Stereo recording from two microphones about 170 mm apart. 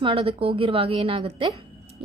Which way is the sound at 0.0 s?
30° right (ahead or behind).